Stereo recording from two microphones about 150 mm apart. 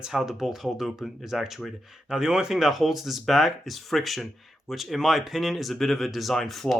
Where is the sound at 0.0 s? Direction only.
5° right (ahead or behind).